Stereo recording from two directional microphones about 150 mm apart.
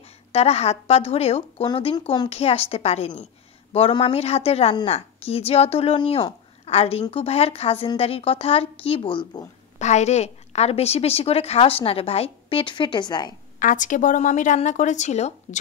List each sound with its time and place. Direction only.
0.3 s a woman's voice: 45° left (ahead or behind)
9.8 s a woman's voice: 50° left (ahead or behind); by 13.3 s 30° left (ahead or behind)
13.6 s a woman's voice: 60° left (ahead or behind)